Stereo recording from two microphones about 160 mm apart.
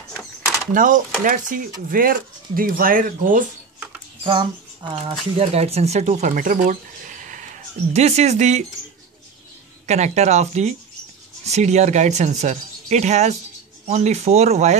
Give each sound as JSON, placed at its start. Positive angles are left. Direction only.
{"t": 0.7, "sound": "speech", "side_deg": -55}
{"t": 4.2, "sound": "speech", "side_deg": -30}
{"t": 5.4, "sound": "speech", "side_deg": -40}
{"t": 7.9, "sound": "speech", "side_deg": -45}
{"t": 9.8, "sound": "speech", "side_deg": -45}